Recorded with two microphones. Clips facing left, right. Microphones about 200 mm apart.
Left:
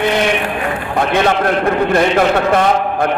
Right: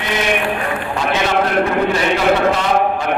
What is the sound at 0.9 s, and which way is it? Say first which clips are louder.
A man's voice: left 4 dB; 55° left (ahead or behind).